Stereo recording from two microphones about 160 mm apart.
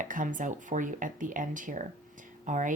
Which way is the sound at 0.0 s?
55° right (ahead or behind).